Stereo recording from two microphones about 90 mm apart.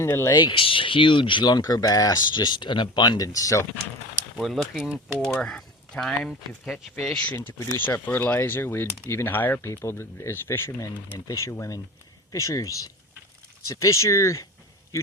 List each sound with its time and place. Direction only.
0.3 s speech: 55° left (ahead or behind)
3.2 s speech: 40° left (ahead or behind)
4.4 s speech: centre (ahead or behind)
7.3 s speech: 25° left (ahead or behind)